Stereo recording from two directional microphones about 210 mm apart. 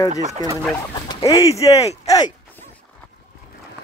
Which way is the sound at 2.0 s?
20° left (ahead or behind).